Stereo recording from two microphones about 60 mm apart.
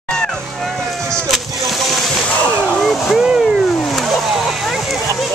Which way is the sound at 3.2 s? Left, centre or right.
Centre.